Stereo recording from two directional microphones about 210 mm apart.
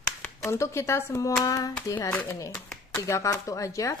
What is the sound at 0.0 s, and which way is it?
Speech, 10° left (ahead or behind).